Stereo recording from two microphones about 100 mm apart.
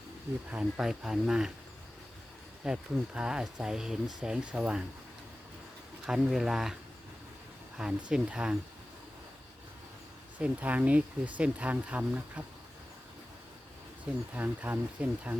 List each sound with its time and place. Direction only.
0.5 s speech: 5° right (ahead or behind)
2.6 s speech: 10° right (ahead or behind)
6.1 s speech: 5° right (ahead or behind)
7.8 s speech: 5° right (ahead or behind)
10.3 s speech: 15° right (ahead or behind)
14.3 s speech: 20° right (ahead or behind)